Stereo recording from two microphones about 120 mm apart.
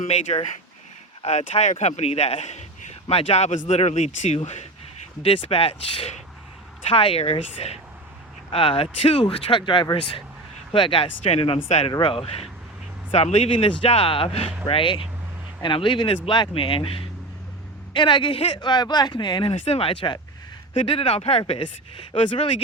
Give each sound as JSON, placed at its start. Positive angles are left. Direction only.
{"t": 0.0, "sound": "speech", "side_deg": 70}
{"t": 3.1, "sound": "speech", "side_deg": 55}
{"t": 5.2, "sound": "speech", "side_deg": 55}
{"t": 8.4, "sound": "speech", "side_deg": 50}
{"t": 11.9, "sound": "speech", "side_deg": 40}
{"t": 13.7, "sound": "speech", "side_deg": 55}
{"t": 19.6, "sound": "speech", "side_deg": 55}
{"t": 22.1, "sound": "speech", "side_deg": 45}